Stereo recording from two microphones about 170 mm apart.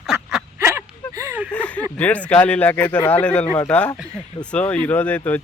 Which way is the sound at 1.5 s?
10° left (ahead or behind).